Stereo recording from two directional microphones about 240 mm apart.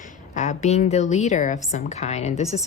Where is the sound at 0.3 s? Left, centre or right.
Left.